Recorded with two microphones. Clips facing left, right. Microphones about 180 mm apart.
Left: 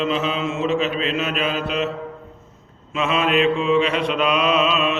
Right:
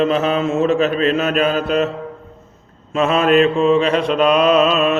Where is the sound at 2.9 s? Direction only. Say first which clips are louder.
Right 6 dB; 45° right (ahead or behind).